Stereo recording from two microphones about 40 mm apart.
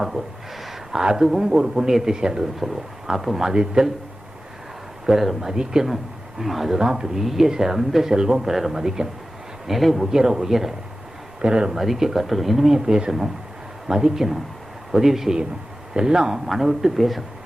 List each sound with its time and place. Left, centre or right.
0.9 s speech: centre
1.9 s speech: centre
2.6 s speech: centre
5.0 s speech: centre
6.4 s speech: centre
6.7 s speech: centre
11.4 s speech: right
11.7 s speech: centre